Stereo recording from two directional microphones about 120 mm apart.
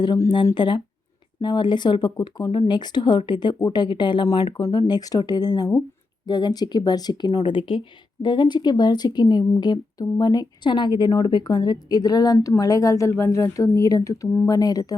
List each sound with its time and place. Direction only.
0.5 s a woman's voice: 40° left (ahead or behind)